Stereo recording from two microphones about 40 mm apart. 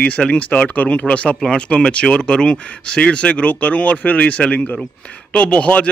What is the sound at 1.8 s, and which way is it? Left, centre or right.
Speech, left.